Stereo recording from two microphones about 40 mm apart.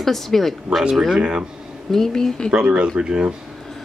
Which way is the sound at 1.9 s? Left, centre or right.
Centre.